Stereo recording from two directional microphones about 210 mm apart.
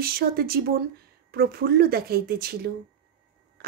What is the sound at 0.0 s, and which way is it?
Speech, 45° right (ahead or behind).